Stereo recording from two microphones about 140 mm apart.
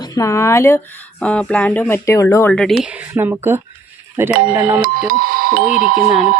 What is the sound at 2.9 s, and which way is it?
Speech, 10° right (ahead or behind).